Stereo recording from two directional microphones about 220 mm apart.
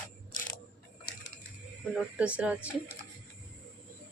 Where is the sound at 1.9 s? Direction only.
5° right (ahead or behind).